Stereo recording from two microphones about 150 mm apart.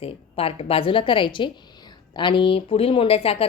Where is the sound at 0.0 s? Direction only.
40° left (ahead or behind).